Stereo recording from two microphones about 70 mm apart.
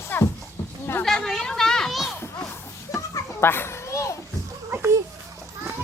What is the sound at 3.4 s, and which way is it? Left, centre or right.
Children playing, left.